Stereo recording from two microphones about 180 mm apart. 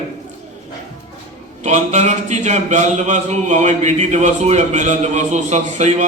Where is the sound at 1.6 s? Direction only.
40° right (ahead or behind).